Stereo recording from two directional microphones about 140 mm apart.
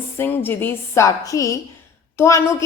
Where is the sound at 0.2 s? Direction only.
15° left (ahead or behind).